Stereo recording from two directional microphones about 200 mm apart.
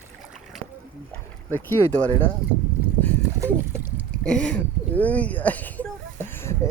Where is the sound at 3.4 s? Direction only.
10° right (ahead or behind).